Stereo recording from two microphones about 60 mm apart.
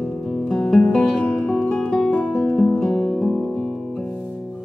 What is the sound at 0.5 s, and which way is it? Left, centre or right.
Music, centre.